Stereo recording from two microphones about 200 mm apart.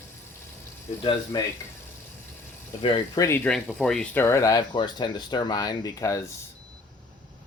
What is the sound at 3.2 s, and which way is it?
Speech, 10° left (ahead or behind).